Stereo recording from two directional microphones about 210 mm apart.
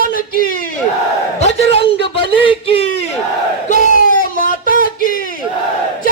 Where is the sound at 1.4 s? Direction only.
30° left (ahead or behind).